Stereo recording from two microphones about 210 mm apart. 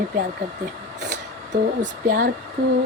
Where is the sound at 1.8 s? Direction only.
40° right (ahead or behind).